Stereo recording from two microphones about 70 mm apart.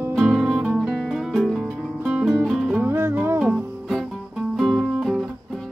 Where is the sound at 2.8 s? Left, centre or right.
Right.